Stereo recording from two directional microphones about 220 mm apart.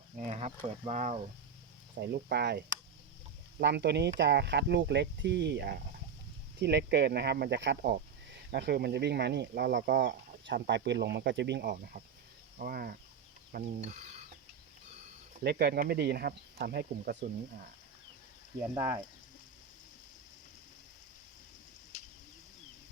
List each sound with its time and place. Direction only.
0.3 s cricket: 30° right (ahead or behind)
0.9 s speech: 30° right (ahead or behind)
2.0 s speech: 50° right (ahead or behind)
13.5 s mechanisms: 35° right (ahead or behind)
15.4 s speech: 45° right (ahead or behind)
18.7 s speech: 10° right (ahead or behind)